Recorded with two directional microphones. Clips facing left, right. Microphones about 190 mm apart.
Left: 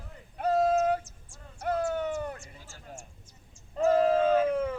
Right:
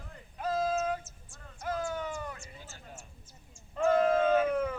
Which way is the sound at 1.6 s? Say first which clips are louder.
Left 5 dB; 65° left (ahead or behind).